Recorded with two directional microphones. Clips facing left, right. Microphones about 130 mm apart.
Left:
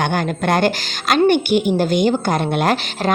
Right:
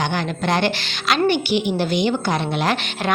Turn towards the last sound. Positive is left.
turn(degrees=50)  # may be behind; listen again after turning